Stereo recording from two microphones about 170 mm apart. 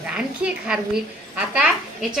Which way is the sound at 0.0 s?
5° right (ahead or behind).